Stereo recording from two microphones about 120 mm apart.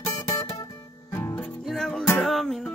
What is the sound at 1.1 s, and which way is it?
Music, 15° left (ahead or behind).